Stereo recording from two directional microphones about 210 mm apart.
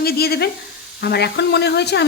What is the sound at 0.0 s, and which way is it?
Speech, 50° left (ahead or behind).